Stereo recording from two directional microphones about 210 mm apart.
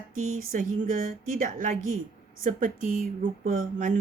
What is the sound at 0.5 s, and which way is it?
Speech, 40° right (ahead or behind).